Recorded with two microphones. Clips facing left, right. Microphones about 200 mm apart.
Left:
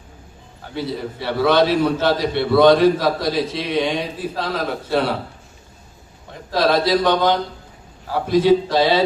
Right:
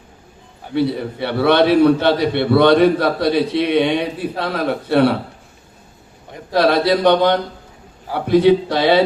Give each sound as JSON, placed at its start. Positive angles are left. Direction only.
{"t": 0.8, "sound": "a man's voice", "side_deg": -60}
{"t": 6.5, "sound": "a man's voice", "side_deg": -60}